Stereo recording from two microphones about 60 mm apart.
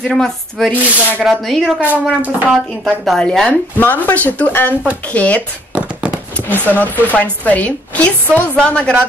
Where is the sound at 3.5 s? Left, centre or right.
Left.